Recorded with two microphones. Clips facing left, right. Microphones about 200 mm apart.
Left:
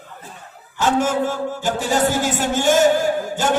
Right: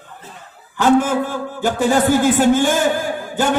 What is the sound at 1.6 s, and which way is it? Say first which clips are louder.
A man's voice: right 5 dB; 55° right (ahead or behind).